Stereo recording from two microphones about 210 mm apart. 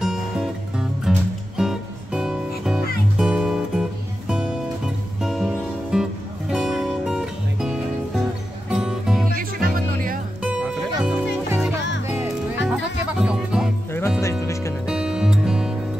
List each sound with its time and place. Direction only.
0.0 s music: centre (ahead or behind)
9.3 s music: 45° right (ahead or behind)
10.4 s music: 5° right (ahead or behind)
14.4 s music: 15° left (ahead or behind)
14.9 s music: 5° right (ahead or behind)